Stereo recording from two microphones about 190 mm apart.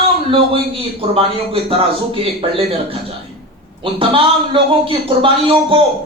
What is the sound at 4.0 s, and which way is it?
A man's voice, 25° right (ahead or behind).